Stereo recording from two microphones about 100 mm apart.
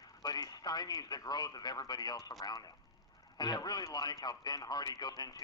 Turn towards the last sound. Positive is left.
turn(degrees=40)  # may be behind; listen again after turning